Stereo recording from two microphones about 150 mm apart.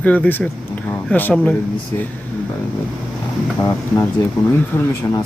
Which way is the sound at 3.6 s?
25° left (ahead or behind).